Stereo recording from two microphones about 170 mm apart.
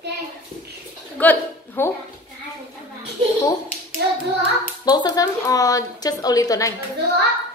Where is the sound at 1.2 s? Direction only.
10° left (ahead or behind).